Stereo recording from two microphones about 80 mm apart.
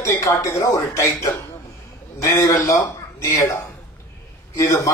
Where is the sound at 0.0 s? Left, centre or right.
Left.